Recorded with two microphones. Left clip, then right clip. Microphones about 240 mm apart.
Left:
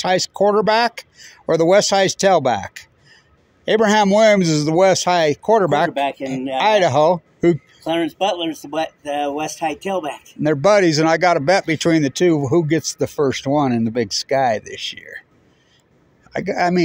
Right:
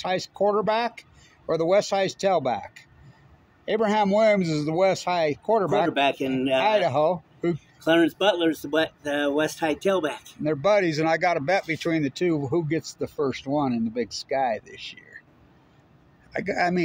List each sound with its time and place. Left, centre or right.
0.0 s a man's voice: left
5.9 s speech: centre
6.6 s a man's voice: left
7.8 s speech: centre
10.4 s a man's voice: left
16.3 s a man's voice: left